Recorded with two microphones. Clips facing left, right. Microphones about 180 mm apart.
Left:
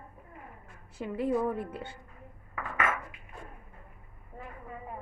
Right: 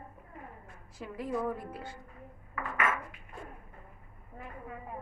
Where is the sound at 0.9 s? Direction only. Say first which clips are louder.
Left 5 dB; 25° left (ahead or behind).